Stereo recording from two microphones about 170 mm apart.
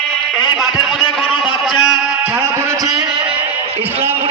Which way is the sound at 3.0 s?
30° right (ahead or behind).